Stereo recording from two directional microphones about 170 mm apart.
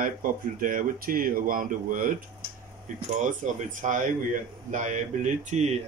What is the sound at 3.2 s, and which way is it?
Speech, 50° right (ahead or behind).